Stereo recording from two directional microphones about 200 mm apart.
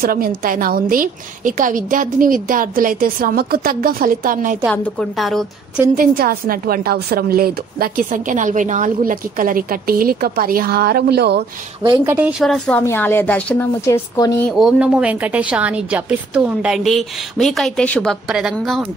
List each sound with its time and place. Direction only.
0.0 s a woman's voice: 45° right (ahead or behind)
4.6 s a woman's voice: centre (ahead or behind)
5.9 s a woman's voice: 45° right (ahead or behind)
11.8 s a woman's voice: 20° right (ahead or behind); by 14.5 s 15° left (ahead or behind)
14.5 s a woman's voice: 5° right (ahead or behind)